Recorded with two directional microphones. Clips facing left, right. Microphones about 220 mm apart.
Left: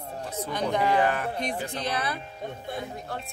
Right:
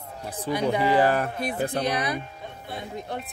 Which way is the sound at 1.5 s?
55° right (ahead or behind).